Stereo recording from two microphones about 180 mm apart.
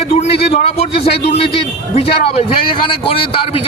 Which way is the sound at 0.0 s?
35° left (ahead or behind).